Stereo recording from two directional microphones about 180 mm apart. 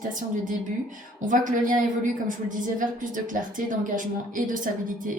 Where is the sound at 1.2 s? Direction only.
45° right (ahead or behind).